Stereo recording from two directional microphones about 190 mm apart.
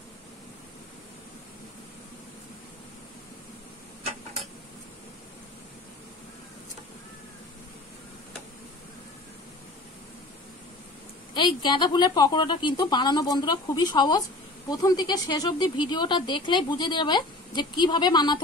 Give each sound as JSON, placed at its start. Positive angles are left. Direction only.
{"t": 11.3, "sound": "speech", "side_deg": 25}